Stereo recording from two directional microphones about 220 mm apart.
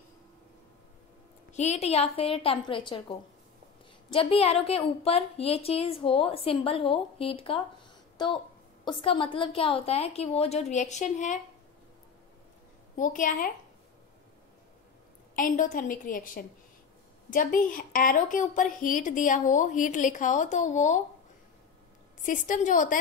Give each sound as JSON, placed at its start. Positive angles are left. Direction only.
{"t": 1.5, "sound": "a woman's voice", "side_deg": 30}
{"t": 12.9, "sound": "a woman's voice", "side_deg": 35}
{"t": 15.3, "sound": "a woman's voice", "side_deg": 35}
{"t": 22.2, "sound": "a woman's voice", "side_deg": 35}